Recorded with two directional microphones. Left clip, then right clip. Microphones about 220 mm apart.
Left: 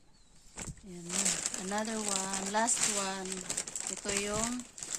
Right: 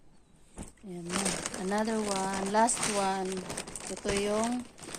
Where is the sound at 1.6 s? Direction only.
35° left (ahead or behind).